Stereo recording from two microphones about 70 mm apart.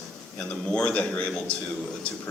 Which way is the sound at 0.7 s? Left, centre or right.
Centre.